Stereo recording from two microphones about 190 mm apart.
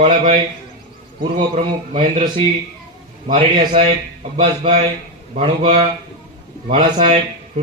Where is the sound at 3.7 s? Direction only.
35° right (ahead or behind).